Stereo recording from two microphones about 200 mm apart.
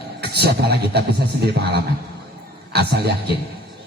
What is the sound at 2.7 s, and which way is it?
Music, 55° right (ahead or behind).